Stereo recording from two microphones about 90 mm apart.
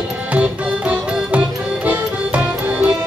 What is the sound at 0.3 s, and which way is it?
Music, 15° right (ahead or behind).